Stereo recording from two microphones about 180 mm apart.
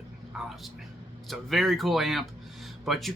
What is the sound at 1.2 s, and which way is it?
A man's voice, centre (ahead or behind).